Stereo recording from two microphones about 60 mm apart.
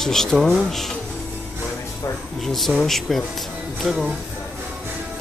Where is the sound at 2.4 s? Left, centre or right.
Centre.